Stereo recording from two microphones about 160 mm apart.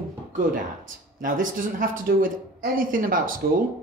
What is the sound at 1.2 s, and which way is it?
Speech, 55° right (ahead or behind).